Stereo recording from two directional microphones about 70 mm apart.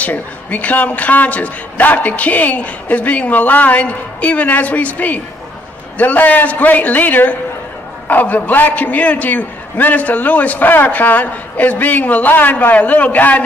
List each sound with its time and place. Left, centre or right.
0.0 s a man's voice: left